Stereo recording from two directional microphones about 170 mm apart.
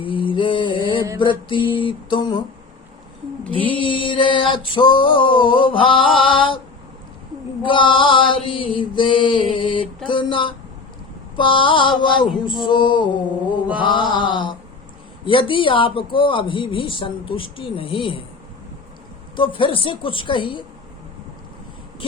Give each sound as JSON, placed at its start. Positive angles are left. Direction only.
{"t": 0.0, "sound": "a sound", "side_deg": 30}
{"t": 1.2, "sound": "mantra", "side_deg": 30}
{"t": 3.5, "sound": "mantra", "side_deg": 30}
{"t": 7.6, "sound": "mantra", "side_deg": 30}
{"t": 15.2, "sound": "speech", "side_deg": 30}
{"t": 19.4, "sound": "mantra", "side_deg": 30}